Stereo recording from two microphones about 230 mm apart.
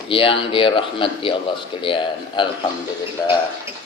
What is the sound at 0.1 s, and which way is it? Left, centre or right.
Speech, left.